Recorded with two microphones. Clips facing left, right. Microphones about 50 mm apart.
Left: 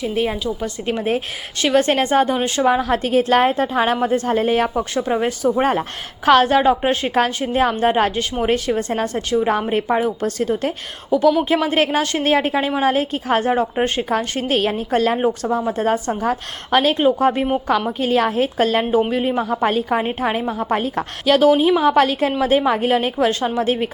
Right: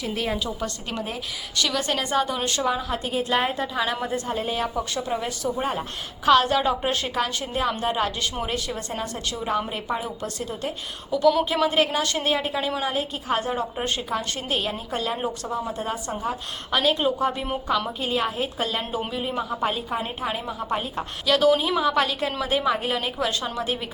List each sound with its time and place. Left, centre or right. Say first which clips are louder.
1.5 s a woman's voice: left 9 dB; left
2.6 s a woman's voice: left 8 dB; left
3.6 s a woman's voice: left 8 dB; left
15.2 s a woman's voice: left 9 dB; left
15.8 s a woman's voice: left 9 dB; left
20.4 s a woman's voice: left 8 dB; left
20.7 s a woman's voice: left 5 dB; left
21.2 s a woman's voice: left 6 dB; left